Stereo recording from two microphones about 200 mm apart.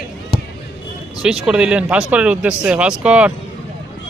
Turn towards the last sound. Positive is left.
turn(degrees=-5)  # may be behind; listen again after turning